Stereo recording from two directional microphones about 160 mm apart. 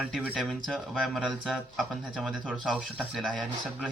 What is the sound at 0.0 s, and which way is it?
Speech, 10° right (ahead or behind).